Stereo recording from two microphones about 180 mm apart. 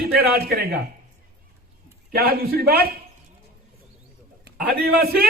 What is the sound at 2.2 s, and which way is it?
Speech, 60° right (ahead or behind).